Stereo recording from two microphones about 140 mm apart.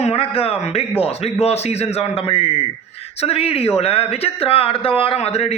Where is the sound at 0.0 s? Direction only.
45° left (ahead or behind).